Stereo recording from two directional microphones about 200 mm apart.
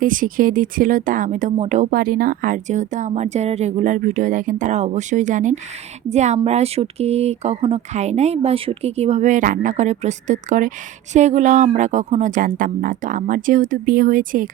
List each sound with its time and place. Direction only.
0.0 s speech: 40° right (ahead or behind)